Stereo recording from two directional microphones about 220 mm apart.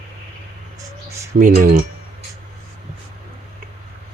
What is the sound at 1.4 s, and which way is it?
Speech, 35° right (ahead or behind).